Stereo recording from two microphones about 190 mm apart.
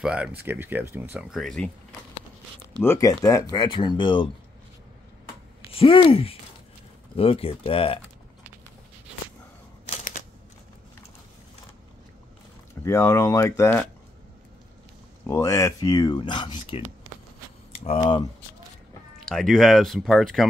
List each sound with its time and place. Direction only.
0.0 s speech: 5° right (ahead or behind)
1.4 s speech: 5° left (ahead or behind)
2.8 s speech: 15° left (ahead or behind)
5.7 s speech: 30° left (ahead or behind)
12.8 s speech: 15° left (ahead or behind)
15.2 s speech: 15° left (ahead or behind)
17.1 s a sound: 90° right
17.7 s speech: 30° left (ahead or behind)
19.2 s speech: centre (ahead or behind)